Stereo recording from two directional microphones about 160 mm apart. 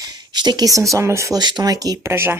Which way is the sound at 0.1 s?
25° right (ahead or behind).